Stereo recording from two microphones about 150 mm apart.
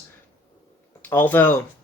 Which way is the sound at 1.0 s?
15° left (ahead or behind).